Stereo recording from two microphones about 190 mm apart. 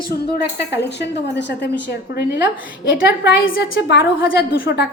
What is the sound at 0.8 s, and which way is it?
Speech, 65° left (ahead or behind).